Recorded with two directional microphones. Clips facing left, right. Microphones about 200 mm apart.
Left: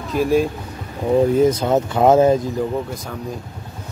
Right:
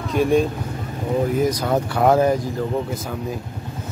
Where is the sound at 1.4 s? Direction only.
25° left (ahead or behind).